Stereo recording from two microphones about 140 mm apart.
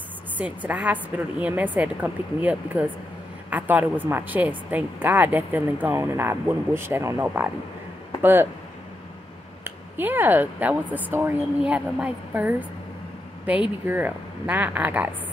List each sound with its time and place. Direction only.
0.4 s a woman's voice: 10° right (ahead or behind)
9.9 s a woman's voice: 15° right (ahead or behind)